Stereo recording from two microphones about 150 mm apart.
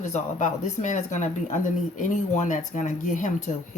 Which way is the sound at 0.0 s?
55° left (ahead or behind).